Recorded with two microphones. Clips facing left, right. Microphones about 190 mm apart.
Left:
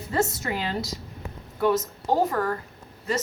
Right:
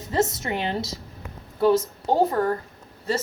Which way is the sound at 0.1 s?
25° right (ahead or behind).